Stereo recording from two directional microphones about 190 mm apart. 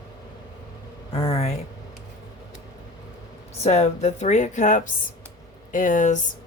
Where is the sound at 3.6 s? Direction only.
35° left (ahead or behind).